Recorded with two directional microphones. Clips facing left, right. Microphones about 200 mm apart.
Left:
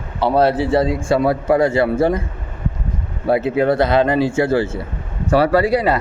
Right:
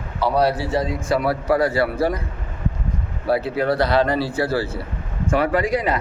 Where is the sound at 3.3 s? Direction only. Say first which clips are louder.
Left 4 dB; 20° left (ahead or behind).